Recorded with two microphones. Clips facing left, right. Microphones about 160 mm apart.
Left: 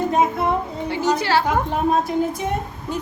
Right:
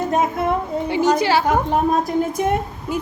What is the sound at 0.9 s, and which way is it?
Speech, 15° right (ahead or behind).